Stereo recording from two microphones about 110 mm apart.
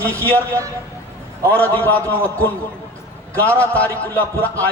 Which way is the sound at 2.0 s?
25° right (ahead or behind).